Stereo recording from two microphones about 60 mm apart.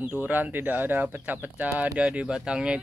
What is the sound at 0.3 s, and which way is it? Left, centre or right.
Speech, right.